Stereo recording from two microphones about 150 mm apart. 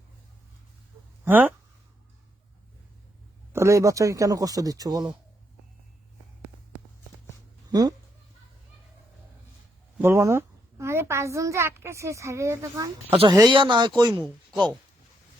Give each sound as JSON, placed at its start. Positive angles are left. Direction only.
{"t": 1.2, "sound": "speech", "side_deg": -10}
{"t": 3.5, "sound": "a man's voice", "side_deg": -20}
{"t": 7.7, "sound": "a sound", "side_deg": -25}
{"t": 10.0, "sound": "a woman's voice", "side_deg": -15}